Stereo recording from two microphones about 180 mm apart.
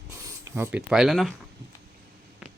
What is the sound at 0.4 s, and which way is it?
Speech, 15° right (ahead or behind).